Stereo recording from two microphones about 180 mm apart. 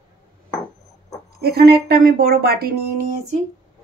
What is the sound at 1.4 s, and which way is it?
Speech, 60° right (ahead or behind).